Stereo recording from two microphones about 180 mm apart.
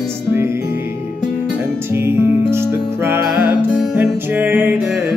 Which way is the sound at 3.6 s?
Centre (ahead or behind).